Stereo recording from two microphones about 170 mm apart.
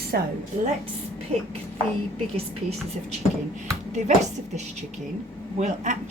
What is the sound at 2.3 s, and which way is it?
Speech, 35° right (ahead or behind).